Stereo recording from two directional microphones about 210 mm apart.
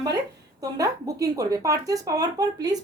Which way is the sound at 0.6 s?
15° right (ahead or behind).